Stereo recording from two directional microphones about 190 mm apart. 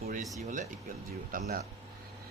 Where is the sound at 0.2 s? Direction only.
Centre (ahead or behind).